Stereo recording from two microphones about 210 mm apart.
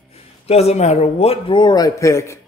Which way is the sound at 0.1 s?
30° left (ahead or behind).